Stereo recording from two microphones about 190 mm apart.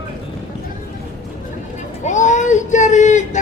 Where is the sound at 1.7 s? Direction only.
40° left (ahead or behind).